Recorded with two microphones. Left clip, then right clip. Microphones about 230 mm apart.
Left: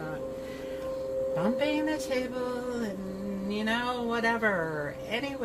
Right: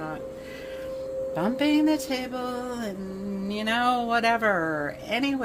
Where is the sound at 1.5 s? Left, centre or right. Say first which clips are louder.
Right 5 dB; right.